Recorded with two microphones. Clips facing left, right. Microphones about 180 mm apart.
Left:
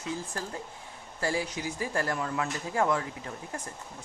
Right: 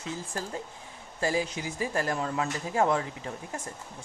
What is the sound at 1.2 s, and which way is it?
Speech, 20° right (ahead or behind).